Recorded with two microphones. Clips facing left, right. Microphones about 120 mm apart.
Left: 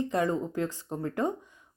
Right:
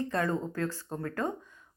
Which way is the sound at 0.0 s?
15° left (ahead or behind).